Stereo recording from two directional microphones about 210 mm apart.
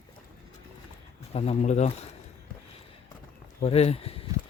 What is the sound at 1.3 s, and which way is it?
Speech, 30° left (ahead or behind).